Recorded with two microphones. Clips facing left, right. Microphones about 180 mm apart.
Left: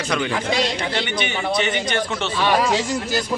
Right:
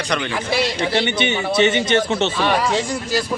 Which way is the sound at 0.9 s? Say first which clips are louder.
Right 5 dB; 25° right (ahead or behind).